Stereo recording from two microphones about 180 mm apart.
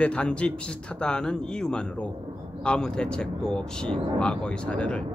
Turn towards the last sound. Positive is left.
turn(degrees=5)  # may be behind; listen again after turning